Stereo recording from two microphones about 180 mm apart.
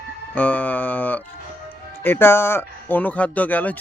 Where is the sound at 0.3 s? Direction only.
10° left (ahead or behind).